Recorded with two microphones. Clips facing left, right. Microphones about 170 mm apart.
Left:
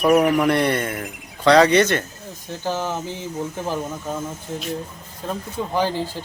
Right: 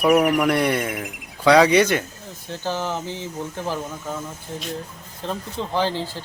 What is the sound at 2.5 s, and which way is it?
Speech, 15° left (ahead or behind).